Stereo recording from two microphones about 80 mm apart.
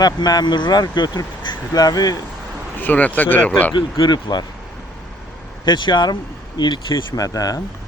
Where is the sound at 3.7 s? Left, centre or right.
Left.